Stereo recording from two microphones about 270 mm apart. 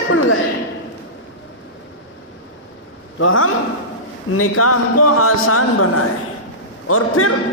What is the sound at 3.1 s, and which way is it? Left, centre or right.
A man's voice, left.